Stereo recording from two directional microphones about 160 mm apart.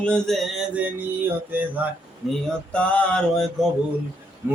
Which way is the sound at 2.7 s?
5° left (ahead or behind).